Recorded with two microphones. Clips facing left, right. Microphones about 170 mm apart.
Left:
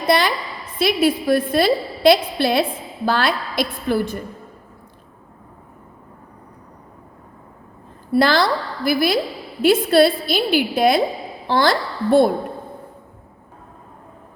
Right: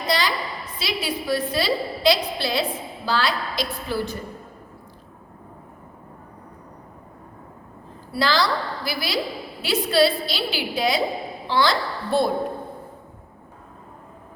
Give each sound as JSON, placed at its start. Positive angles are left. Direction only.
{"t": 0.1, "sound": "a woman's voice", "side_deg": 55}
{"t": 8.1, "sound": "a woman's voice", "side_deg": 55}